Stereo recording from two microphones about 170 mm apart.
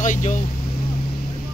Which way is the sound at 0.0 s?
45° left (ahead or behind).